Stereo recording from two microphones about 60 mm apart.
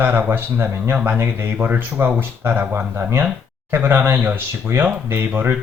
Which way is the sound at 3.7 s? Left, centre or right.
Right.